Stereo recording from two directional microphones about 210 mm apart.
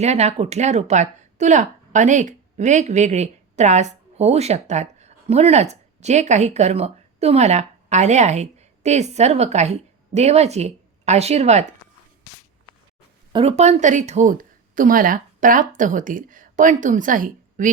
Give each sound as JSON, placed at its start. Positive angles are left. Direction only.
{"t": 0.0, "sound": "a woman's voice", "side_deg": -30}
{"t": 13.3, "sound": "a woman's voice", "side_deg": -30}